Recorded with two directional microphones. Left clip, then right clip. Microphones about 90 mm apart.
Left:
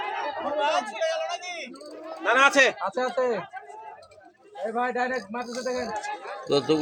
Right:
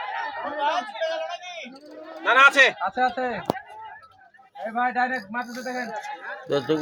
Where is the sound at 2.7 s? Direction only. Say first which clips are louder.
Right 3 dB; 45° left (ahead or behind).